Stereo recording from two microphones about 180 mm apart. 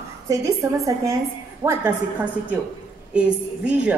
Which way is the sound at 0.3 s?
15° right (ahead or behind).